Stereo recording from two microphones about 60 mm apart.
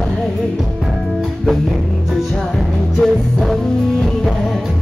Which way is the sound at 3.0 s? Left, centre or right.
Centre.